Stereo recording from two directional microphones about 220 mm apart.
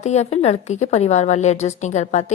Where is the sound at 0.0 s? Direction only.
30° left (ahead or behind).